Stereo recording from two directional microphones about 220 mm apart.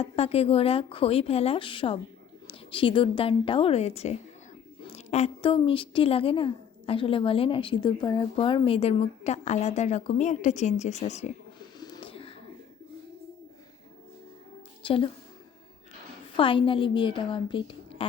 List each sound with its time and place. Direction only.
0.0 s a woman's voice: 25° left (ahead or behind)
11.8 s a sound: 20° left (ahead or behind)
14.8 s a woman's voice: 25° left (ahead or behind)
16.4 s a woman's voice: 25° left (ahead or behind)